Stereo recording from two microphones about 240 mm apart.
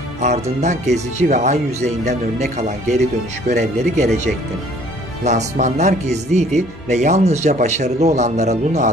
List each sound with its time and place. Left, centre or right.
0.2 s speech: right